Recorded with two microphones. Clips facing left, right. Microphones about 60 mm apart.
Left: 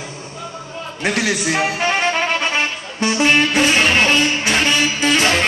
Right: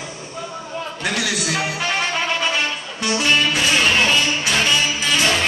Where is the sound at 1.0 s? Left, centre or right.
Left.